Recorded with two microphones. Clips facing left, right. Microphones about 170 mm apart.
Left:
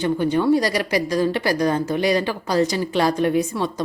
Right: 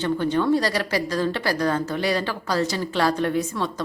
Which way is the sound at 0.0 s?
10° left (ahead or behind).